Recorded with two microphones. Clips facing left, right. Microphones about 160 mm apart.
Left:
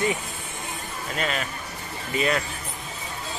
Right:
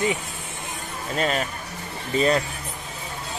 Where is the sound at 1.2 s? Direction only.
40° right (ahead or behind).